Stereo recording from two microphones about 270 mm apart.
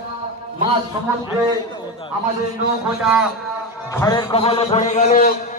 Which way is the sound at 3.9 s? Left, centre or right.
Centre.